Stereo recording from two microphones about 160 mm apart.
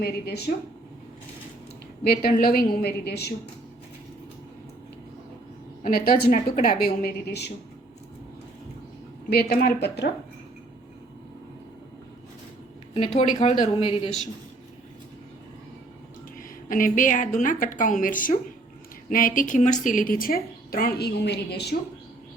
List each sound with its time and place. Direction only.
0.0 s speech: 85° left
2.0 s a woman's voice: 65° left (ahead or behind); by 3.3 s 90° left
5.8 s a woman's voice: 65° left (ahead or behind); by 7.5 s 85° left
9.6 s a woman's voice: 75° left (ahead or behind)
13.2 s speech: 45° left (ahead or behind)
13.6 s speech: 35° left (ahead or behind)
16.4 s a woman's voice: 60° left (ahead or behind); by 21.8 s 90° left